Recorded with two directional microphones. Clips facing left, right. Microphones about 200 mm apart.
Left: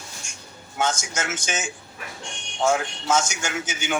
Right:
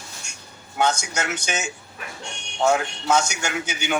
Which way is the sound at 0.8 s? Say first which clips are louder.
Right 3 dB; 65° right (ahead or behind).